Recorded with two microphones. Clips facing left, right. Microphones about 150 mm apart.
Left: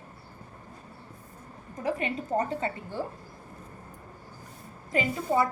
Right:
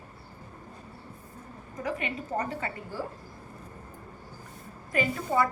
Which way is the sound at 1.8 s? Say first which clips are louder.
Left 3 dB; 30° left (ahead or behind).